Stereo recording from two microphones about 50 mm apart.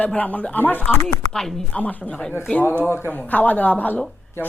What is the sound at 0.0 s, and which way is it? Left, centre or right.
Speech, left.